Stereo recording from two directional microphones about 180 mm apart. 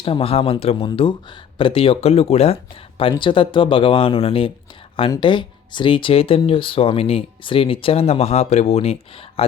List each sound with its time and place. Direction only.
0.0 s speech: 30° left (ahead or behind)